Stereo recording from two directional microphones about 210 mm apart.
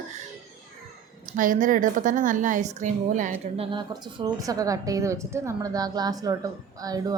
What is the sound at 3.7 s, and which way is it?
Speech, 20° right (ahead or behind).